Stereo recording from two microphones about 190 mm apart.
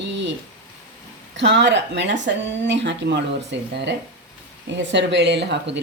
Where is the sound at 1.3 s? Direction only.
70° right (ahead or behind).